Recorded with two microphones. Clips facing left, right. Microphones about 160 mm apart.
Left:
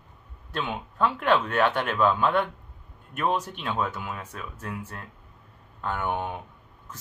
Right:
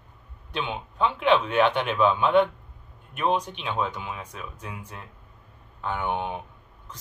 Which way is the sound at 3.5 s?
15° right (ahead or behind).